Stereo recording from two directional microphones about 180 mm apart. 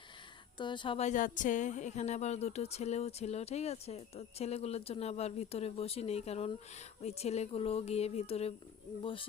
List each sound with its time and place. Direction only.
0.6 s speech: 25° left (ahead or behind)